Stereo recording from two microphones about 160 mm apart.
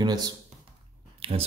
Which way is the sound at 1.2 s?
35° right (ahead or behind).